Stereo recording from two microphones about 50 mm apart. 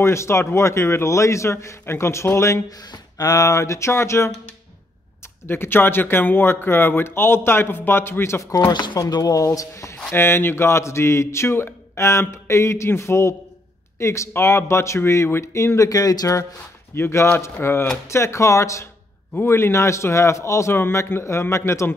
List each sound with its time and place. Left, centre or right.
0.0 s a man's voice: left
1.9 s speech: left
3.4 s a man's voice: left
5.5 s speech: left
9.0 s speech: left
10.1 s speech: left
16.9 s speech: left
18.0 s a man's voice: left
19.4 s a man's voice: left